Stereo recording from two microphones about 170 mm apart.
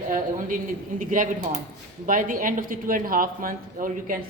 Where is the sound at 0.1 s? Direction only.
50° right (ahead or behind).